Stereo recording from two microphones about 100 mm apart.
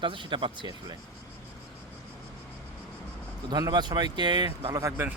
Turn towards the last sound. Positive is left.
turn(degrees=-30)  # may be behind; listen again after turning